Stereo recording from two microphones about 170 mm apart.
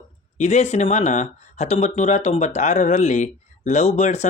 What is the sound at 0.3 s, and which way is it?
Speech, 45° left (ahead or behind).